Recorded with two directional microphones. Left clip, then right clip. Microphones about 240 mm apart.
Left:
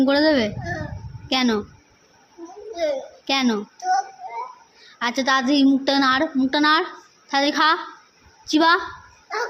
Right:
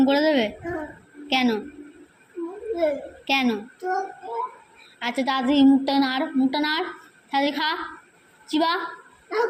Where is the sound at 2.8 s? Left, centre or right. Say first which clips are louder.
Left 1 dB; centre.